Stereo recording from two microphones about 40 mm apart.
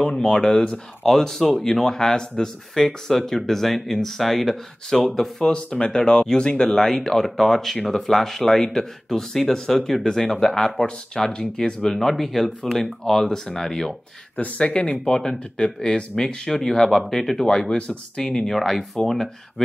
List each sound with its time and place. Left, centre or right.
0.0 s speech: centre
5.5 s speech: left; by 13.9 s centre
14.3 s speech: left
14.7 s speech: left